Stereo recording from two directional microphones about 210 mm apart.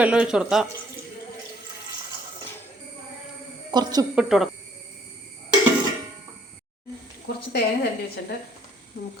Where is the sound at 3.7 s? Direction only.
20° right (ahead or behind).